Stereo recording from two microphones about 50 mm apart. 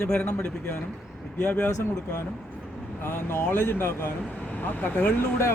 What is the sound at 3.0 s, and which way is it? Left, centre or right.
Speech, left.